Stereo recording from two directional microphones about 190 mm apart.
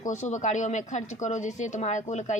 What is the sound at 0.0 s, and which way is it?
A woman's voice, 40° left (ahead or behind).